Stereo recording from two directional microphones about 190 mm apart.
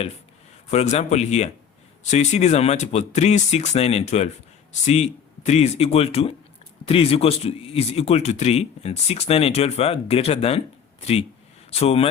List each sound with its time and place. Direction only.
0.7 s speech: 35° left (ahead or behind)